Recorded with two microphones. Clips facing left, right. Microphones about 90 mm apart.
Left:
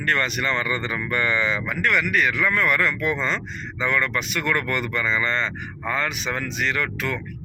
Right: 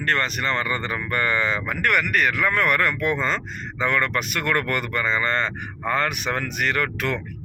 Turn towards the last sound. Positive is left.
turn(degrees=-55)  # may be behind; listen again after turning